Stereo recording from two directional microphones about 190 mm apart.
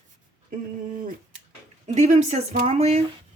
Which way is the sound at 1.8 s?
35° right (ahead or behind).